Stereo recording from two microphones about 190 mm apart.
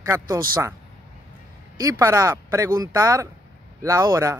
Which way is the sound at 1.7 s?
15° right (ahead or behind).